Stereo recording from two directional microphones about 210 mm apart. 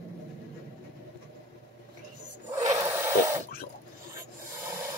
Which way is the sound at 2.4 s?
15° right (ahead or behind).